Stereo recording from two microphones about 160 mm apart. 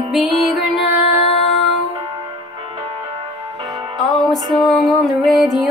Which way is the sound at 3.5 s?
30° right (ahead or behind).